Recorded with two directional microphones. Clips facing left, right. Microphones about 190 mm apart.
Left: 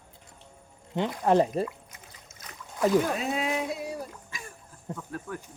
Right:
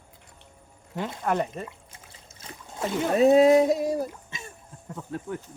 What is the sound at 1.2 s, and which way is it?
Speech, 30° left (ahead or behind).